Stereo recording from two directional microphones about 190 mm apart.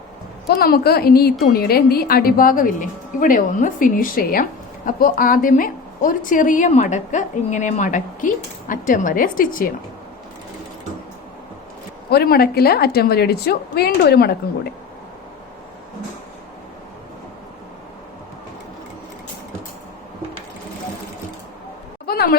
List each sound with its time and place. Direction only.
0.4 s a woman's voice: 55° left (ahead or behind)
12.1 s a woman's voice: 55° left (ahead or behind)
22.0 s a sound: 55° left (ahead or behind)